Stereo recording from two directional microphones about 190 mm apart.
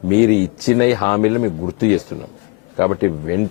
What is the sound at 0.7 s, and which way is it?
Speech, 15° left (ahead or behind).